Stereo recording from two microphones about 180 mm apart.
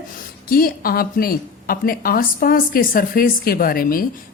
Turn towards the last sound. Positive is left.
turn(degrees=50)  # may be behind; listen again after turning